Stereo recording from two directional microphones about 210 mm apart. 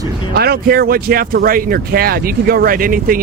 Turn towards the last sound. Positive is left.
turn(degrees=-40)  # may be behind; listen again after turning